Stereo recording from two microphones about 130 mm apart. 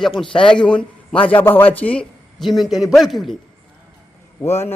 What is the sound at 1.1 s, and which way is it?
Speech, 40° left (ahead or behind).